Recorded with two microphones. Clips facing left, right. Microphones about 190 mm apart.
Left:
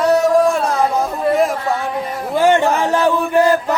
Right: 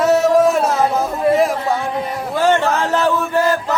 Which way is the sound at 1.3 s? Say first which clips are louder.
Even; centre (ahead or behind).